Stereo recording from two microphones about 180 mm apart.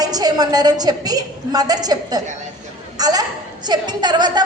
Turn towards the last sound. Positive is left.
turn(degrees=-25)  # may be behind; listen again after turning